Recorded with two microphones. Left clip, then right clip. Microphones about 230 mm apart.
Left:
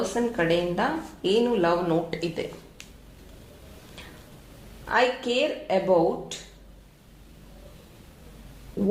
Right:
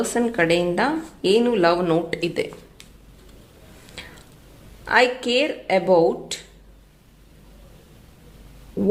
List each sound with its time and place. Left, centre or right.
0.2 s speech: right
4.0 s a sound: right
4.9 s speech: right
8.8 s speech: right